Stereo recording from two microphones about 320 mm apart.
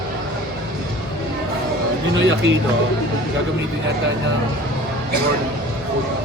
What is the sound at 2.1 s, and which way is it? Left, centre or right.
Speech, right.